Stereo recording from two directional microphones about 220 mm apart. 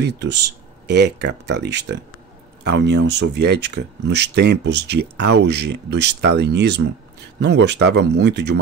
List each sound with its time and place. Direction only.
0.0 s speech: 50° right (ahead or behind)